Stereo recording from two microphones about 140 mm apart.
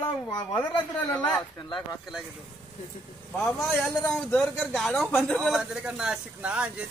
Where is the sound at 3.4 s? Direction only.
Centre (ahead or behind).